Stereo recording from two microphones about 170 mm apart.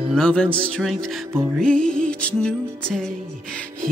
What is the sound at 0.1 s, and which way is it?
Music, 5° left (ahead or behind).